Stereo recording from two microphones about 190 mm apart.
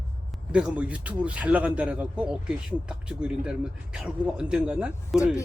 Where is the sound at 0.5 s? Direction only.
5° right (ahead or behind).